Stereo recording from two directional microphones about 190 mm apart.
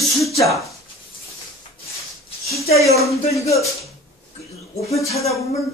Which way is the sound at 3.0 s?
Centre (ahead or behind).